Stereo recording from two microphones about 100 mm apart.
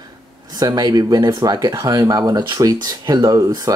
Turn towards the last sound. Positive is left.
turn(degrees=-35)  # may be behind; listen again after turning